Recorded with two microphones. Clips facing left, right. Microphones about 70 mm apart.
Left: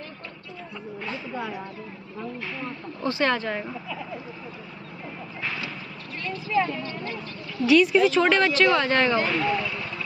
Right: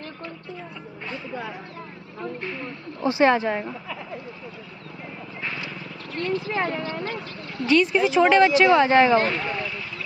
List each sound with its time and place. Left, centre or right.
3.0 s speech: centre
6.1 s speech: right
6.5 s speech: right
7.0 s speech: right
7.6 s speech: centre